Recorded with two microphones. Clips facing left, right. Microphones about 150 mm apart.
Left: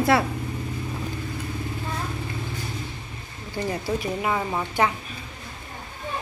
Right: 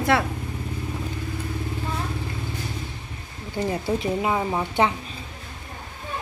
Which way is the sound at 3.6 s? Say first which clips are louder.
Right 2 dB; 20° right (ahead or behind).